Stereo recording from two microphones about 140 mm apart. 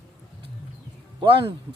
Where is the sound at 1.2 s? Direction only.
35° right (ahead or behind).